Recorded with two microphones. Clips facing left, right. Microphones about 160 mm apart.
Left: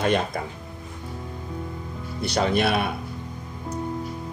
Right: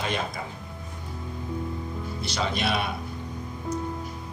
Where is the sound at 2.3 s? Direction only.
55° left (ahead or behind).